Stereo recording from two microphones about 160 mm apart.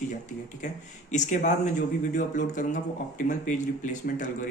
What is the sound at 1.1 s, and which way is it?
Speech, 50° left (ahead or behind).